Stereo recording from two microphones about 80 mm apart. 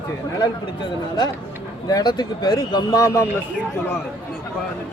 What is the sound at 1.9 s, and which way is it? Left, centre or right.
Speech, left.